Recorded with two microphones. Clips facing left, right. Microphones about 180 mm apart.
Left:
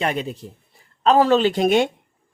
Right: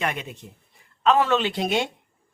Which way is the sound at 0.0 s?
35° left (ahead or behind).